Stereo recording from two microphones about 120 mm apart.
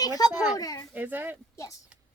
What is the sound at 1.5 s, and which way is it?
Speech, 25° left (ahead or behind).